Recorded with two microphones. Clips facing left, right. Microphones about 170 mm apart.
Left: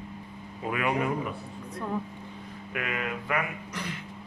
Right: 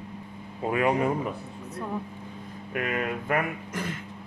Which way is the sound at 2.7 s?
40° right (ahead or behind).